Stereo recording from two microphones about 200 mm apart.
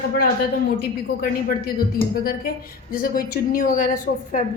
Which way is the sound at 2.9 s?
45° left (ahead or behind).